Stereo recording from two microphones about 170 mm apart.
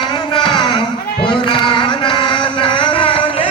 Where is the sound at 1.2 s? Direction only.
30° left (ahead or behind).